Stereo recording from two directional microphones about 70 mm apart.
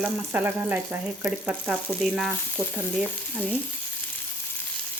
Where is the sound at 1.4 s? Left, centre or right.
Centre.